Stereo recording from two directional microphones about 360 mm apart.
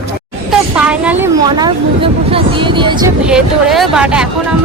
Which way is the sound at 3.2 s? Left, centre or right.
Centre.